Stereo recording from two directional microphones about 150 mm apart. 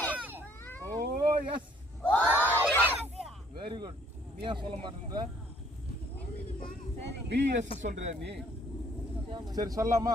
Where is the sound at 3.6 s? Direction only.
30° right (ahead or behind).